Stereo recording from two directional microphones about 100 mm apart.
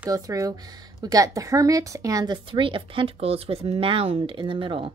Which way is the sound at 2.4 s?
60° right (ahead or behind).